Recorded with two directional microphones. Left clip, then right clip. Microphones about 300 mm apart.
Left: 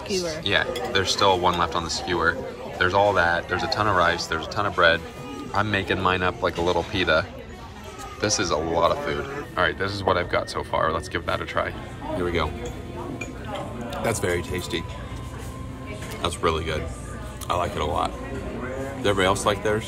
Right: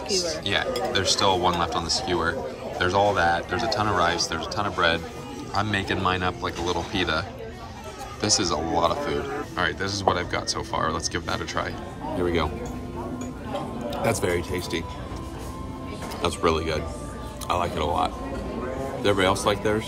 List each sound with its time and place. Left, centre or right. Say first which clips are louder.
0.1 s speech: left 1 dB; centre
14.0 s speech: even; centre
16.2 s speech: right 1 dB; centre